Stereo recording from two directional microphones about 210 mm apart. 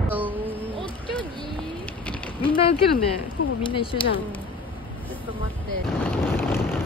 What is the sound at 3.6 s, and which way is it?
Speech, 25° left (ahead or behind).